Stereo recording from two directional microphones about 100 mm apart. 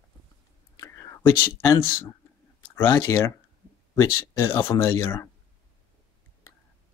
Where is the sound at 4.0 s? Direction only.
40° left (ahead or behind).